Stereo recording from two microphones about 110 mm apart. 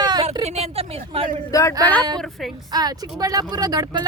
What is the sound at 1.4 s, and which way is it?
Speech, 30° left (ahead or behind).